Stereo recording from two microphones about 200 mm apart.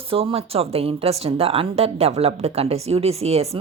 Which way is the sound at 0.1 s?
30° right (ahead or behind).